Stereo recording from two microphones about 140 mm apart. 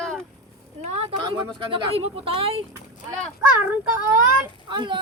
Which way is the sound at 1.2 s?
35° right (ahead or behind).